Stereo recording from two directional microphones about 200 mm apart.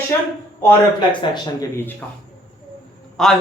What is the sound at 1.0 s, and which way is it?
Speech, 20° left (ahead or behind).